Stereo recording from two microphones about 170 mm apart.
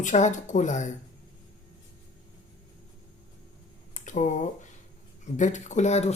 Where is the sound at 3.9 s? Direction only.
50° left (ahead or behind).